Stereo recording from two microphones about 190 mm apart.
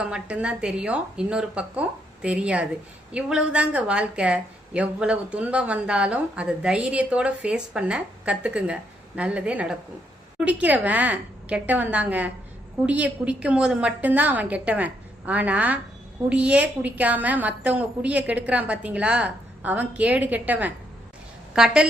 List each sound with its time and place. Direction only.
0.0 s a woman's voice: 5° right (ahead or behind)